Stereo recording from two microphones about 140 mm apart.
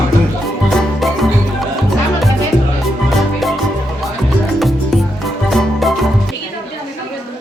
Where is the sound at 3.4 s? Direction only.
Centre (ahead or behind).